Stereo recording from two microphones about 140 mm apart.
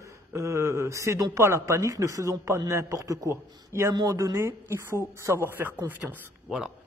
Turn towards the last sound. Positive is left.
turn(degrees=-5)  # may be behind; listen again after turning